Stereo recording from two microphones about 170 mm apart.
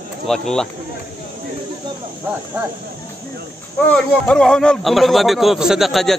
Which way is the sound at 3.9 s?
5° left (ahead or behind).